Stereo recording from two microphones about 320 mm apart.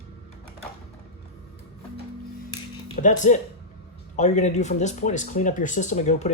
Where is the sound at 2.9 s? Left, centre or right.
Left.